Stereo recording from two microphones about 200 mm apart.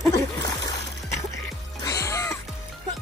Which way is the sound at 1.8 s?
15° left (ahead or behind).